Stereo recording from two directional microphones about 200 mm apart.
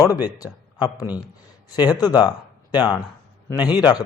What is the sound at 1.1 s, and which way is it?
Speech, 10° right (ahead or behind).